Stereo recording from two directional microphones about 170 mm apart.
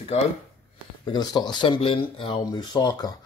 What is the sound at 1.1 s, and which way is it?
Speech, 25° left (ahead or behind).